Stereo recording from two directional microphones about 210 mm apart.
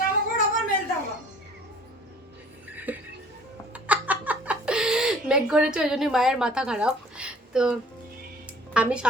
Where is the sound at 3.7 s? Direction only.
5° right (ahead or behind).